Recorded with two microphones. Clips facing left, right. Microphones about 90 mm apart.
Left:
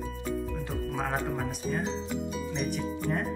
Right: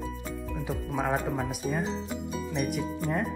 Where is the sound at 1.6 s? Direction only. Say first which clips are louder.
Left 1 dB; 5° right (ahead or behind).